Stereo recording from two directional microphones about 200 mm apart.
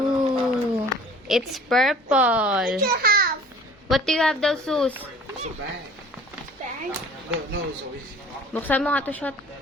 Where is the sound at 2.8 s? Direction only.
50° right (ahead or behind).